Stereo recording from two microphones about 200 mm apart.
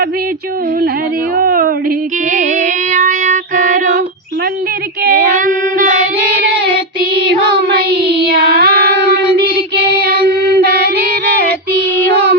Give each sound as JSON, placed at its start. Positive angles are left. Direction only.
{"t": 1.4, "sound": "a sound", "side_deg": -45}
{"t": 2.3, "sound": "female singing", "side_deg": -40}
{"t": 5.3, "sound": "child singing", "side_deg": -40}
{"t": 8.3, "sound": "child singing", "side_deg": -50}
{"t": 10.6, "sound": "female singing", "side_deg": -50}